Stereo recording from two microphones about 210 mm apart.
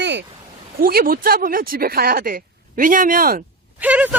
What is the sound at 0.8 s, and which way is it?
Speech, 45° right (ahead or behind).